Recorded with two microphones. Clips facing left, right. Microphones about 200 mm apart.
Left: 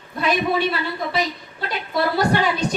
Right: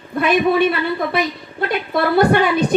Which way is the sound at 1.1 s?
55° right (ahead or behind).